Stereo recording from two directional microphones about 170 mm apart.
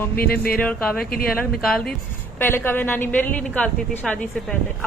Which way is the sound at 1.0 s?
65° left (ahead or behind).